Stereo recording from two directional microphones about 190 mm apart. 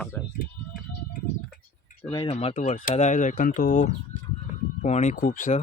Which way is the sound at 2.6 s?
45° left (ahead or behind).